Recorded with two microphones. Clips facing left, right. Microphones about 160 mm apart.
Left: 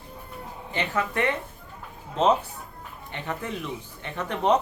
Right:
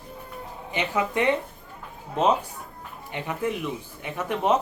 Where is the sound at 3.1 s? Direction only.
15° right (ahead or behind).